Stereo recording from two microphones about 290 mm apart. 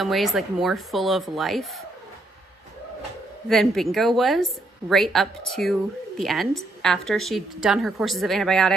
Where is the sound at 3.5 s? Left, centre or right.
Centre.